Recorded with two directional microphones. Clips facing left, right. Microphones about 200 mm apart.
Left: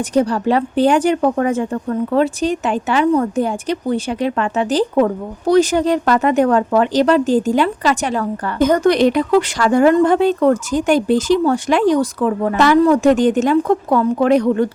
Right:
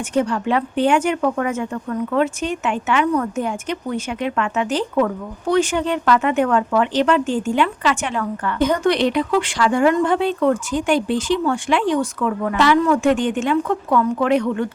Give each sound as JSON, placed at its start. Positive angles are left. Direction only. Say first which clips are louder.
{"t": 0.0, "sound": "speech", "louder": "left 4 dB", "side_deg": 35}
{"t": 12.5, "sound": "speech", "louder": "left 4 dB", "side_deg": 45}